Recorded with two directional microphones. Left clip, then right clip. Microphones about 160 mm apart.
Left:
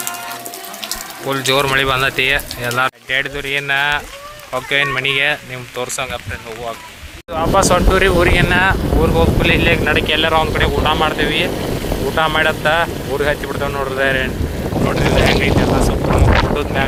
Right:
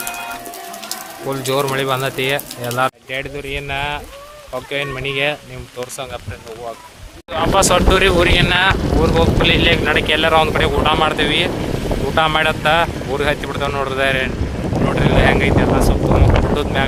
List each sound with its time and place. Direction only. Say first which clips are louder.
1.3 s speech: left 4 dB; 10° right (ahead or behind)
3.1 s speech: left 6 dB; centre (ahead or behind); by 6.1 s 20° left (ahead or behind)
7.3 s speech: left 1 dB; centre (ahead or behind)
7.7 s speech: even; 15° right (ahead or behind); by 16.8 s 5° left (ahead or behind)